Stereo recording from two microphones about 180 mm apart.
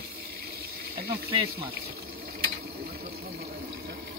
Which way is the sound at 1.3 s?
30° right (ahead or behind).